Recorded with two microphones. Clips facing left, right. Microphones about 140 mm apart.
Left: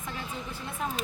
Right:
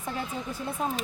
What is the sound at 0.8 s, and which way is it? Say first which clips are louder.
Speech: right 3 dB; 35° right (ahead or behind).